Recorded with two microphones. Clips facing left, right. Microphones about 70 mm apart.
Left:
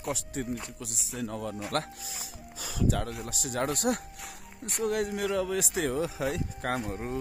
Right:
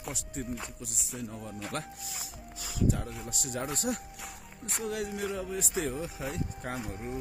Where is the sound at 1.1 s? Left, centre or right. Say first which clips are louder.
Left 6 dB; left.